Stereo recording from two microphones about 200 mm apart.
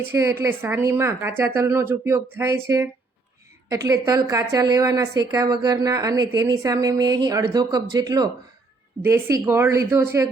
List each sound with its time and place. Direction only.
0.1 s a woman's voice: 15° right (ahead or behind)